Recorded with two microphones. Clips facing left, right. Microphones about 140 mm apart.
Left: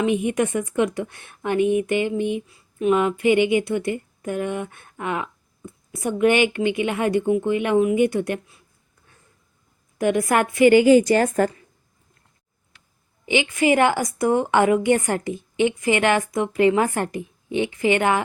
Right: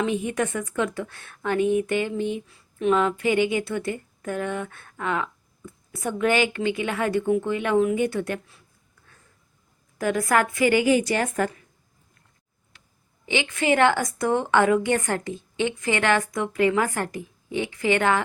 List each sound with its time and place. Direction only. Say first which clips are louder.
0.0 s a woman's voice: left 4 dB; 15° left (ahead or behind)
10.0 s a woman's voice: left 3 dB; 20° left (ahead or behind); by 11.5 s 40° left (ahead or behind)
13.2 s a woman's voice: left 4 dB; 15° left (ahead or behind)